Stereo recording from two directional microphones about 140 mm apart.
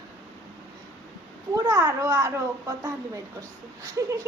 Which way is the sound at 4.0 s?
20° right (ahead or behind).